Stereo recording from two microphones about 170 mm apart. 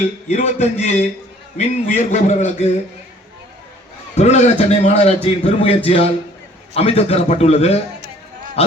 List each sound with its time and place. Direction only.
0.3 s a man's voice: 40° left (ahead or behind)
4.2 s a man's voice: 40° left (ahead or behind)